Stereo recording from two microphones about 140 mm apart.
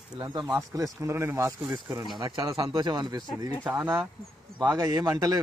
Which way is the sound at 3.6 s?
15° right (ahead or behind).